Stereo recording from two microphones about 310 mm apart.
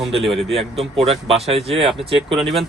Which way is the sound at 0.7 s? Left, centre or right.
Centre.